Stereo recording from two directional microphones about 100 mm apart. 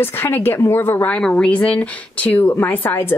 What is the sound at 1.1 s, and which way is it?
Speech, 10° left (ahead or behind).